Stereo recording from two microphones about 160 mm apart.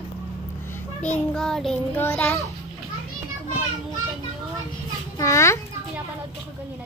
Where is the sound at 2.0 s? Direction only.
15° left (ahead or behind).